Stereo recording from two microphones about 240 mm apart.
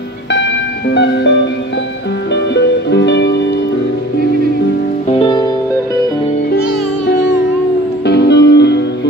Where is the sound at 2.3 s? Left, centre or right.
Left.